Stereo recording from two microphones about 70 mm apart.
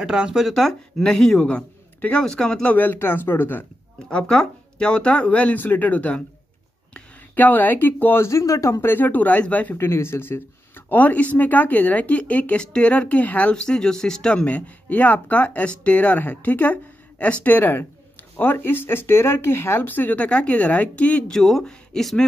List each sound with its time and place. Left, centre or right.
0.0 s speech: centre
0.5 s speech: centre
2.7 s speech: left
4.1 s speech: centre; by 8.3 s left
8.3 s speech: left
8.8 s speech: left
9.8 s speech: left
10.9 s speech: left
21.3 s speech: centre